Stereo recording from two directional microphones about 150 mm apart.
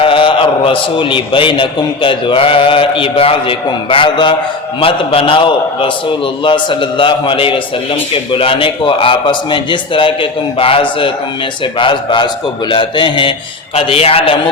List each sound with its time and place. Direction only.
0.0 s a man's voice: 35° left (ahead or behind)